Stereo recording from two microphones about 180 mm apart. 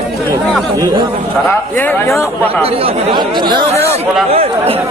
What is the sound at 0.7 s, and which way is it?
Speech, 20° right (ahead or behind).